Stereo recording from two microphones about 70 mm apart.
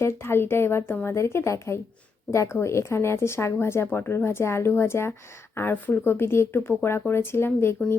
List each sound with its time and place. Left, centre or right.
0.0 s speech: left